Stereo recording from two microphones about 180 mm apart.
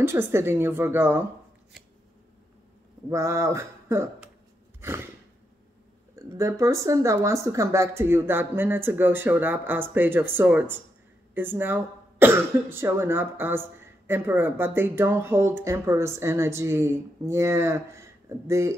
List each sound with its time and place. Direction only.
0.0 s speech: 15° right (ahead or behind)
3.1 s speech: 15° right (ahead or behind)
6.1 s speech: 15° right (ahead or behind)